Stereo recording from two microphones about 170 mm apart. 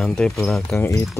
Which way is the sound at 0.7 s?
15° left (ahead or behind).